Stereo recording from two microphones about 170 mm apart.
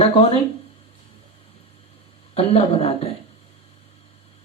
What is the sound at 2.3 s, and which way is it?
Speech, 35° left (ahead or behind).